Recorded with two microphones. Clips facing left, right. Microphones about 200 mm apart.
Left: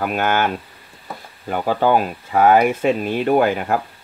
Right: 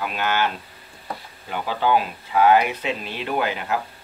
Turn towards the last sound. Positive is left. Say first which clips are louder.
# left 8 dB
turn(degrees=50)  # may be behind; listen again after turning